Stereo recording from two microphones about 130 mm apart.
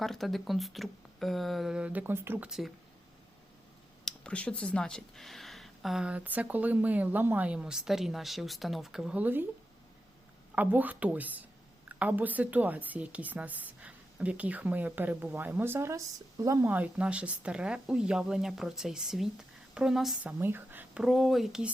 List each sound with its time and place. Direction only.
0.0 s speech: centre (ahead or behind); by 2.5 s 15° right (ahead or behind)
2.5 s speech: centre (ahead or behind)
4.0 s speech: 10° left (ahead or behind); by 9.4 s 10° right (ahead or behind)
10.5 s speech: 15° right (ahead or behind)
16.7 s speech: 10° right (ahead or behind)
20.4 s a sound: 15° right (ahead or behind)
21.0 s speech: centre (ahead or behind)